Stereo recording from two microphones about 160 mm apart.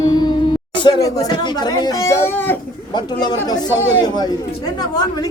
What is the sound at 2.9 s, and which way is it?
A man's voice, 25° left (ahead or behind).